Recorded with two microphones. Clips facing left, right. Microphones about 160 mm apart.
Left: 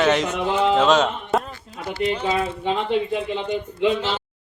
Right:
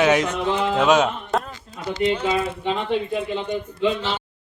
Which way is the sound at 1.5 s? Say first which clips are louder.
Right 1 dB; 20° right (ahead or behind).